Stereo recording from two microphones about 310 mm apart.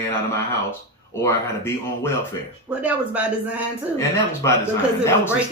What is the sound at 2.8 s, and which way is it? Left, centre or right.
Speech, centre.